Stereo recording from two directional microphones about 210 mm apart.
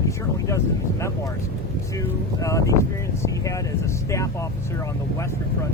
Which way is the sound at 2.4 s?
15° left (ahead or behind).